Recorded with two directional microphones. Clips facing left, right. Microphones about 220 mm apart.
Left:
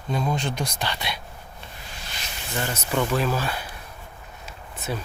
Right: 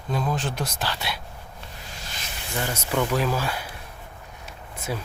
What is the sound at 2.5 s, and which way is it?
Speech, 10° right (ahead or behind).